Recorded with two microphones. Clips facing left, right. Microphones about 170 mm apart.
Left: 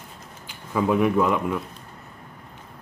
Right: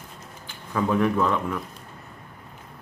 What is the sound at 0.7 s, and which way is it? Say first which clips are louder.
Speech: left 2 dB; 10° left (ahead or behind).